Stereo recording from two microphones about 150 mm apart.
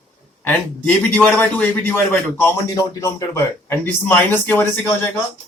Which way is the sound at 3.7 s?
15° left (ahead or behind).